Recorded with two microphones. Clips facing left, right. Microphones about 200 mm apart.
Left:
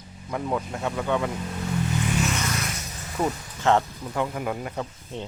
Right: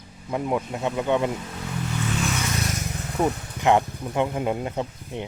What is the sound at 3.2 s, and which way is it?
Speech, 15° right (ahead or behind).